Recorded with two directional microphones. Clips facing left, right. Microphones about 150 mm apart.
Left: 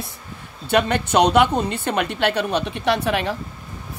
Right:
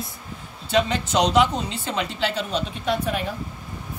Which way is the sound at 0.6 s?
60° left (ahead or behind).